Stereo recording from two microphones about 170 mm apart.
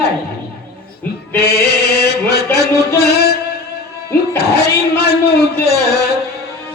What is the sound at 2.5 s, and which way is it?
Music, 70° left (ahead or behind).